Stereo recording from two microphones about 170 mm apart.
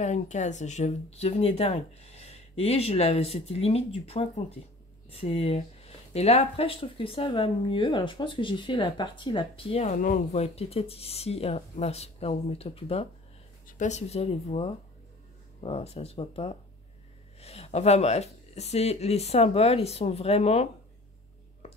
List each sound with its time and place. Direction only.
0.0 s speech: 45° left (ahead or behind)